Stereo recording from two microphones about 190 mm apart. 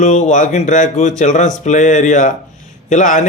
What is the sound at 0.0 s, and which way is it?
Speech, 40° left (ahead or behind).